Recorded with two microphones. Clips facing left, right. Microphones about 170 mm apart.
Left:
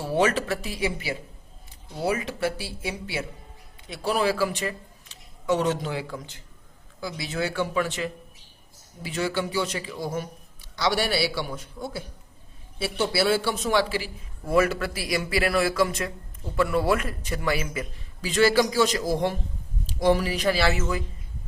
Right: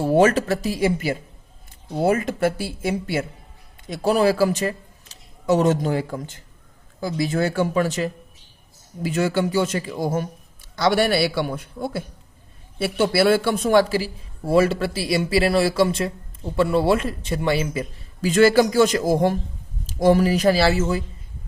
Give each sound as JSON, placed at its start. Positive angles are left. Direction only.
{"t": 0.0, "sound": "a man's voice", "side_deg": -45}
{"t": 18.2, "sound": "a man's voice", "side_deg": -45}